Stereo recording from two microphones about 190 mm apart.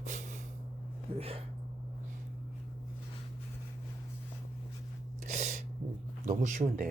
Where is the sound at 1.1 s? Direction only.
30° right (ahead or behind).